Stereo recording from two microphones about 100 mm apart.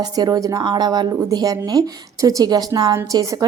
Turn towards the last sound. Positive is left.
turn(degrees=-35)  # may be behind; listen again after turning